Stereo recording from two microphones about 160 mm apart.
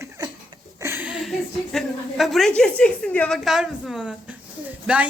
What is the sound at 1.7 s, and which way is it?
A woman's voice, centre (ahead or behind).